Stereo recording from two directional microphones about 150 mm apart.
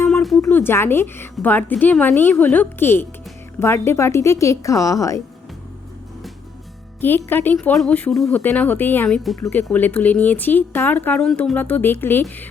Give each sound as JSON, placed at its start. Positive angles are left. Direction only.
{"t": 0.1, "sound": "a sound", "side_deg": 5}
{"t": 0.5, "sound": "a woman's voice", "side_deg": 15}
{"t": 7.3, "sound": "a woman's voice", "side_deg": 15}
{"t": 8.4, "sound": "a woman's voice", "side_deg": 10}